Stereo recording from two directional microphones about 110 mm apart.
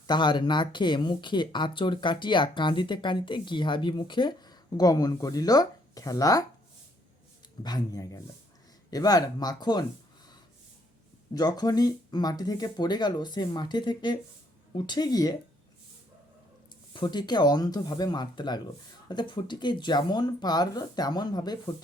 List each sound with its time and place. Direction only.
0.1 s speech: 45° left (ahead or behind)
7.6 s speech: 35° left (ahead or behind)
11.3 s speech: 35° left (ahead or behind)
16.9 s speech: 45° left (ahead or behind)